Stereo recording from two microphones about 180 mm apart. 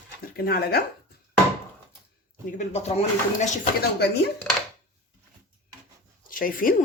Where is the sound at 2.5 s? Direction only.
35° left (ahead or behind).